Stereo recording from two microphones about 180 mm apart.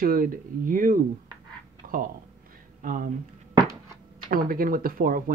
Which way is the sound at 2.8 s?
50° right (ahead or behind).